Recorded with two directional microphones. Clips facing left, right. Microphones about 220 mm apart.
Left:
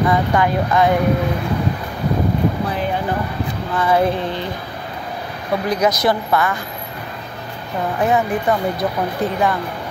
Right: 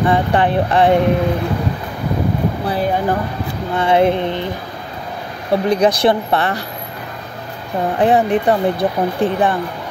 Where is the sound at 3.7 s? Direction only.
25° right (ahead or behind).